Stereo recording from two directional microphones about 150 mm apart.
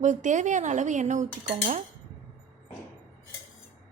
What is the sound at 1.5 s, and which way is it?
Speech, 40° right (ahead or behind).